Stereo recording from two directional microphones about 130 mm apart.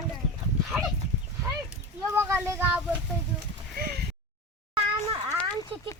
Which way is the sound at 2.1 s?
20° right (ahead or behind).